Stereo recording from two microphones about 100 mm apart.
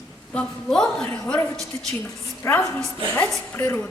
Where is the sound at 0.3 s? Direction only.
5° left (ahead or behind).